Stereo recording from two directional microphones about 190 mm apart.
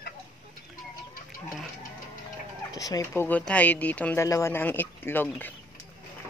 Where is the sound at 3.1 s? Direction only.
10° left (ahead or behind).